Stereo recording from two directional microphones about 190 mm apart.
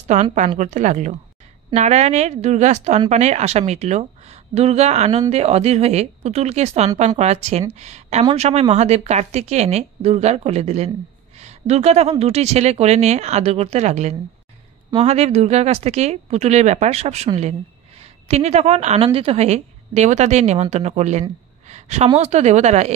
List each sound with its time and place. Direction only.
0.1 s a woman's voice: 40° right (ahead or behind)